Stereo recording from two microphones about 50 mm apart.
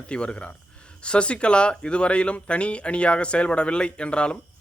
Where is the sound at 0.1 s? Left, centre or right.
Left.